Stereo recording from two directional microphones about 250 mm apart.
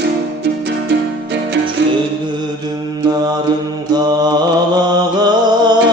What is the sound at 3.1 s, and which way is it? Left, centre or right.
Mantra, centre.